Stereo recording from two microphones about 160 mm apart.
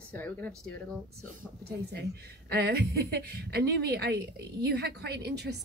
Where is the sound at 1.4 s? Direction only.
80° right.